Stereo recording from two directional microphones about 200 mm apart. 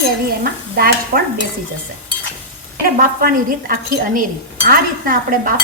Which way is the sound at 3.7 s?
45° right (ahead or behind).